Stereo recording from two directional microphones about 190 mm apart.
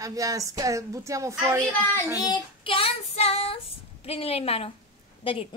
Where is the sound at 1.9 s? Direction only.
20° left (ahead or behind).